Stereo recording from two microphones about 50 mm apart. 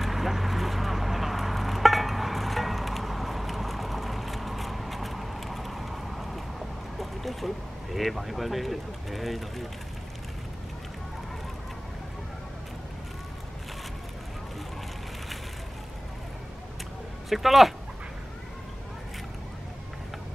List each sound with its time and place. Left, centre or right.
0.0 s a sound: centre
7.0 s speech: centre
17.3 s speech: centre